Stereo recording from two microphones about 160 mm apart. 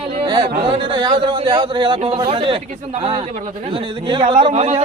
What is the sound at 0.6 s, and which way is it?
A man's voice, 30° right (ahead or behind).